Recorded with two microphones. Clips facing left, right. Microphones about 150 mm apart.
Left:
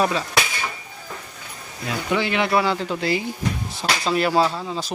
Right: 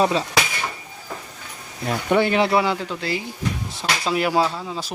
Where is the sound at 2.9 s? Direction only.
15° left (ahead or behind).